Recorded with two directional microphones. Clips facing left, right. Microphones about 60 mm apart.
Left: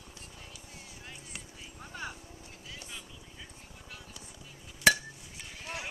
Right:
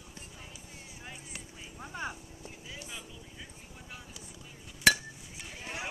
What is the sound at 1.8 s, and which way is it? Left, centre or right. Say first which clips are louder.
Vehicle: right 3 dB; right.